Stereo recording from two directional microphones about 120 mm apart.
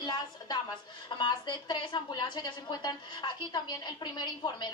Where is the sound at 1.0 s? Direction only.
40° left (ahead or behind).